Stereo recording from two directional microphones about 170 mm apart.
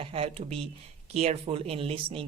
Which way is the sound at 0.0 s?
35° right (ahead or behind).